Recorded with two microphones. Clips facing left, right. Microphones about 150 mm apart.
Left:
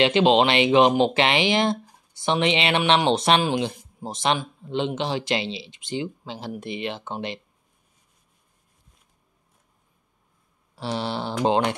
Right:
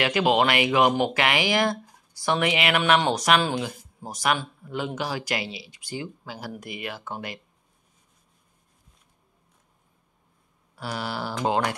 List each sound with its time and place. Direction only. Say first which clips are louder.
0.0 s speech: left 4 dB; 25° left (ahead or behind)
10.8 s speech: left 3 dB; 25° left (ahead or behind)